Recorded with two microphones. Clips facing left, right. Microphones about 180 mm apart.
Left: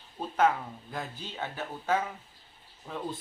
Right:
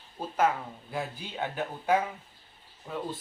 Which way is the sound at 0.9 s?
10° right (ahead or behind).